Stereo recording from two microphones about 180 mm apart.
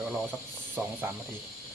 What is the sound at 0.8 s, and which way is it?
Speech, 10° right (ahead or behind).